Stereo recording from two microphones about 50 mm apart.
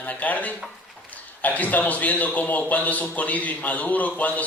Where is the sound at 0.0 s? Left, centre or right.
Left.